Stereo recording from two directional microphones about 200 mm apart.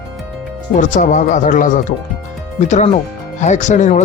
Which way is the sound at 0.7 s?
40° left (ahead or behind).